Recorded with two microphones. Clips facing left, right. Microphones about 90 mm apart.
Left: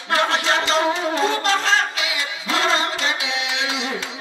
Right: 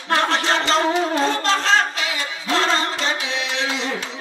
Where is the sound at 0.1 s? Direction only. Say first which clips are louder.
Even; 40° right (ahead or behind).